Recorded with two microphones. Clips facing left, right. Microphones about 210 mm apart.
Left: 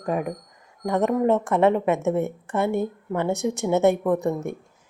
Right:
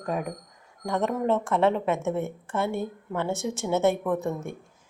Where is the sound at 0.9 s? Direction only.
15° left (ahead or behind).